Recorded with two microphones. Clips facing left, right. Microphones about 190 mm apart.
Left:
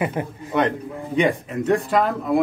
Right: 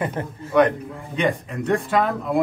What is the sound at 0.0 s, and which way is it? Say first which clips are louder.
Speech: left 2 dB; 15° left (ahead or behind).